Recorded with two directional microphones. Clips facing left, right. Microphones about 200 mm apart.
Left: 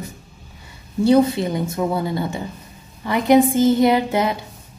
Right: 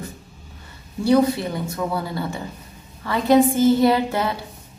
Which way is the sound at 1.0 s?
20° left (ahead or behind).